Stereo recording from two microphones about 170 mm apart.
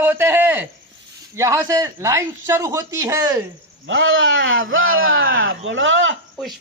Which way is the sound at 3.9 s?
90° right.